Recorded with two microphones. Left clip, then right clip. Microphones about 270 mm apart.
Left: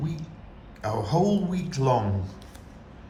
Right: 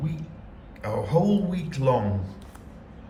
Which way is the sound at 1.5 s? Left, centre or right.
Centre.